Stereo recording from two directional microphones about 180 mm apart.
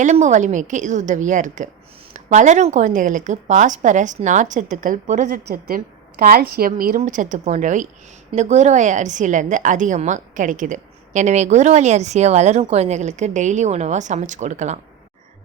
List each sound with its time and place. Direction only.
0.0 s speech: 40° right (ahead or behind)
5.5 s a woman's voice: 55° right (ahead or behind); by 14.8 s 40° right (ahead or behind)